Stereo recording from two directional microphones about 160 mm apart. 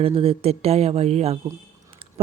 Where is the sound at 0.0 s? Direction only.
35° right (ahead or behind).